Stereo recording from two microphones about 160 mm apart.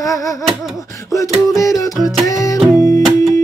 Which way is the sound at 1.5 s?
20° left (ahead or behind).